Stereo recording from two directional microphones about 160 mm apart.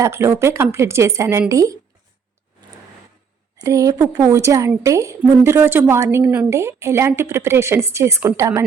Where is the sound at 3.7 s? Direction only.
20° right (ahead or behind).